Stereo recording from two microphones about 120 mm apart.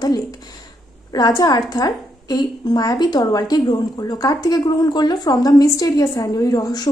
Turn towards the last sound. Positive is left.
turn(degrees=30)  # may be behind; listen again after turning